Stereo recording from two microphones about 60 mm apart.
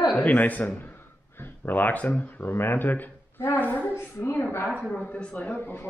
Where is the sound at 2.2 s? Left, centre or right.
Left.